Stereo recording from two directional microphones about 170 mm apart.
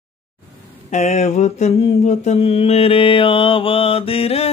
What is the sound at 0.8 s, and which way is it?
Mantra, 45° left (ahead or behind).